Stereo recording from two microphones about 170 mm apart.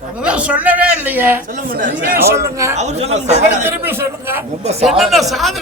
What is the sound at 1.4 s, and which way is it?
Speech, 50° right (ahead or behind).